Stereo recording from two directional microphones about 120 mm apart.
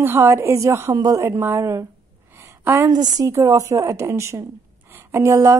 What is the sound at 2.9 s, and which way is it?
A woman's voice, 35° right (ahead or behind).